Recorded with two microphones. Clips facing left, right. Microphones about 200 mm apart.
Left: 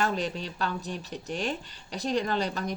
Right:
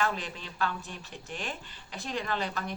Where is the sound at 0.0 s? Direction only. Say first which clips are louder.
Left 4 dB; 40° left (ahead or behind).